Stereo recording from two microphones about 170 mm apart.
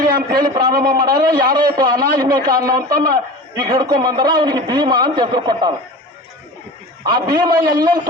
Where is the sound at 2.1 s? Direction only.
20° right (ahead or behind).